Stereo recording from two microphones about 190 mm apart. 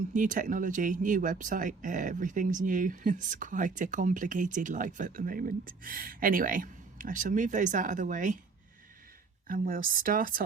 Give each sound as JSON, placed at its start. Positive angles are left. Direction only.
{"t": 0.1, "sound": "speech", "side_deg": -45}
{"t": 9.5, "sound": "speech", "side_deg": -50}